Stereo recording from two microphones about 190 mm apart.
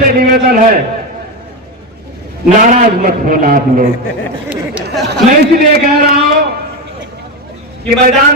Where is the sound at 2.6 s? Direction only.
45° right (ahead or behind).